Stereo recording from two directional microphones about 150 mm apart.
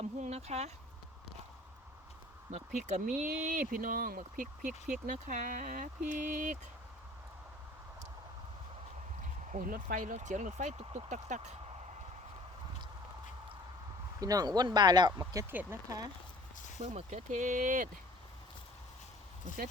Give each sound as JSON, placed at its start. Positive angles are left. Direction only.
{"t": 0.0, "sound": "a sound", "side_deg": -45}
{"t": 2.5, "sound": "speech", "side_deg": -50}
{"t": 9.5, "sound": "speech", "side_deg": -65}
{"t": 14.2, "sound": "speech", "side_deg": -25}
{"t": 16.8, "sound": "speech", "side_deg": -50}